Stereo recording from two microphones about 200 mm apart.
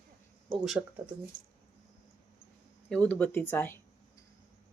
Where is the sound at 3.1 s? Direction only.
10° left (ahead or behind).